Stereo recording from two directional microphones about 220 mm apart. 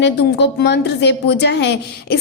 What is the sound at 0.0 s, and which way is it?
A woman's voice, 50° left (ahead or behind).